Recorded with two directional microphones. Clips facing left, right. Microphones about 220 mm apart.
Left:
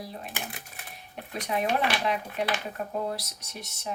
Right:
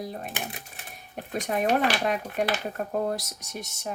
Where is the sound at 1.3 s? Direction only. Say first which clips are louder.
Right 2 dB; 45° right (ahead or behind).